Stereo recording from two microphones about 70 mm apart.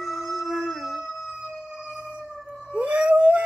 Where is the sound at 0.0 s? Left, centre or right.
Centre.